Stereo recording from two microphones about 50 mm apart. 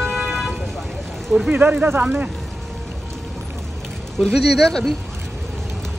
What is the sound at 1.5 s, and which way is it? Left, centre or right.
Speech, right.